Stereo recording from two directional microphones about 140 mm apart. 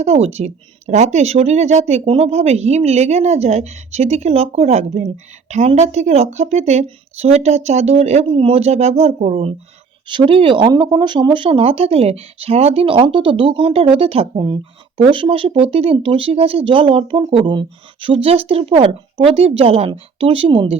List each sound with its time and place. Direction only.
0.0 s speech: 50° right (ahead or behind)